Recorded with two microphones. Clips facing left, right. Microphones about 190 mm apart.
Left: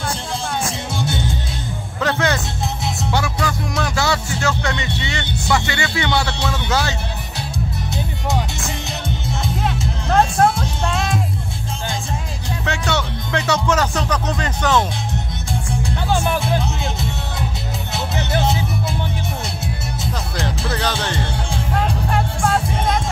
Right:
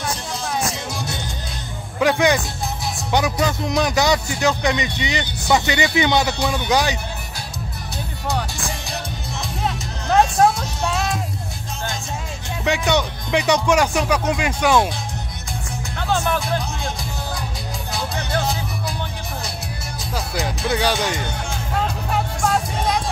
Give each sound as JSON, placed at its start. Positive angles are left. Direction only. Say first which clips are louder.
{"t": 0.7, "sound": "music", "louder": "left 3 dB", "side_deg": 25}
{"t": 2.0, "sound": "a man's voice", "louder": "right 3 dB", "side_deg": -15}
{"t": 8.3, "sound": "music", "louder": "left 1 dB", "side_deg": 20}
{"t": 10.9, "sound": "music", "louder": "even", "side_deg": -5}
{"t": 12.6, "sound": "speech", "louder": "right 4 dB", "side_deg": -15}
{"t": 16.3, "sound": "speech", "louder": "left 3 dB", "side_deg": 25}
{"t": 17.9, "sound": "music", "louder": "left 2 dB", "side_deg": 25}
{"t": 20.3, "sound": "speech", "louder": "right 3 dB", "side_deg": -10}
{"t": 22.4, "sound": "music", "louder": "even", "side_deg": 0}